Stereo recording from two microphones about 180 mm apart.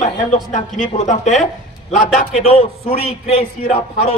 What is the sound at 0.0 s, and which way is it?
A man's voice, 45° left (ahead or behind).